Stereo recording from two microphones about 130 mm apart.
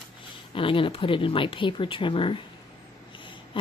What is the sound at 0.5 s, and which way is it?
Speech, 45° left (ahead or behind).